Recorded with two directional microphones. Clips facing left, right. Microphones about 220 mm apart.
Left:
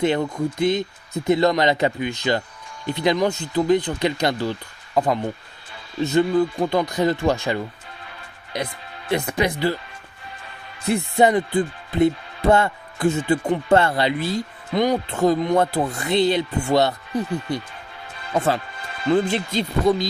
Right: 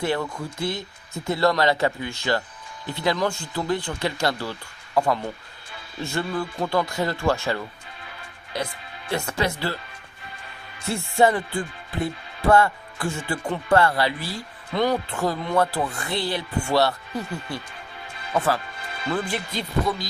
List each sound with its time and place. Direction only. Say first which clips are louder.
0.0 s music: left 5 dB; 20° left (ahead or behind)
9.1 s speech: left 4 dB; 15° left (ahead or behind)
10.8 s music: left 3 dB; 20° left (ahead or behind)